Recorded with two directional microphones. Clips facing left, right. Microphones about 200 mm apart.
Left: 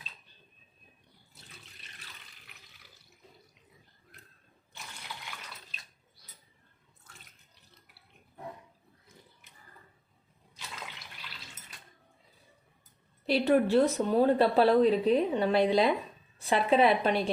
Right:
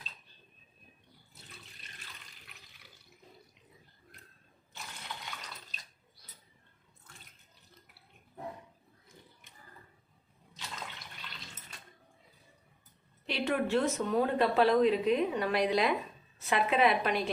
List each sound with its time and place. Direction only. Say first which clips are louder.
13.2 s speech: left 7 dB; 35° left (ahead or behind)